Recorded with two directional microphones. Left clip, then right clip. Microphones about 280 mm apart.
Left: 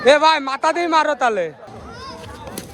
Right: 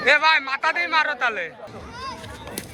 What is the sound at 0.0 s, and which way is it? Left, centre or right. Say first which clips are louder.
A man's voice: left 4 dB; centre.